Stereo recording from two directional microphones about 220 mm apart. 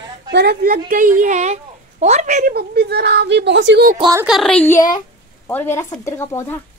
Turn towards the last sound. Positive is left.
turn(degrees=10)  # may be behind; listen again after turning